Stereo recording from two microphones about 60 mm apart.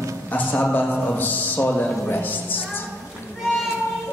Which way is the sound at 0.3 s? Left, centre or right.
Left.